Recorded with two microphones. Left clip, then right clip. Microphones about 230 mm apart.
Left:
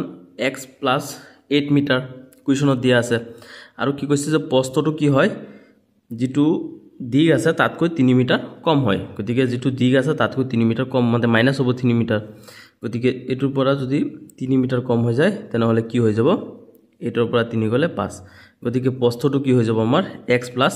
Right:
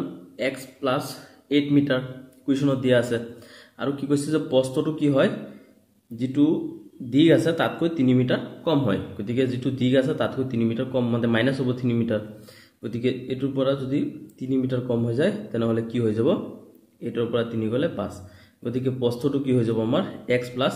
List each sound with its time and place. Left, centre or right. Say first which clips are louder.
0.4 s speech: left 4 dB; left